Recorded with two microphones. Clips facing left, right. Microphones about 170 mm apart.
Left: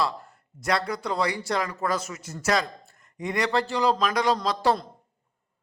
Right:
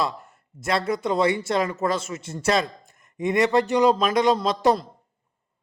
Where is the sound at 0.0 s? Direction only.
20° right (ahead or behind).